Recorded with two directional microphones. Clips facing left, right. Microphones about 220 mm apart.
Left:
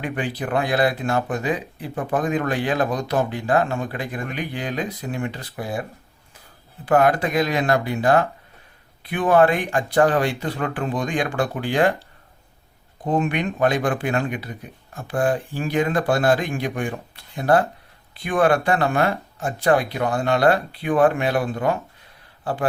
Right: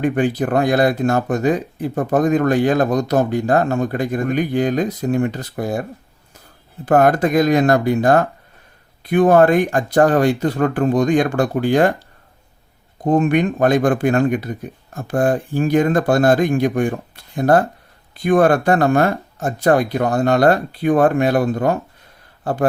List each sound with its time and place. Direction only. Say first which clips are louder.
0.0 s speech: right 9 dB; 45° right (ahead or behind)
6.8 s speech: right 4 dB; 45° right (ahead or behind)
13.1 s speech: right 7 dB; 45° right (ahead or behind)